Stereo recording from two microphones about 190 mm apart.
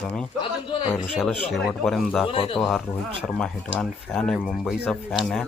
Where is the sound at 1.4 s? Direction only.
Centre (ahead or behind).